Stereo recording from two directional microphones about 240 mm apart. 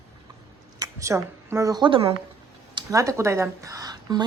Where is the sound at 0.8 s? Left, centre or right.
Centre.